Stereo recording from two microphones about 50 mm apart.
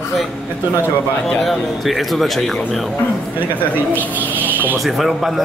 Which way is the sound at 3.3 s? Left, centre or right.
Right.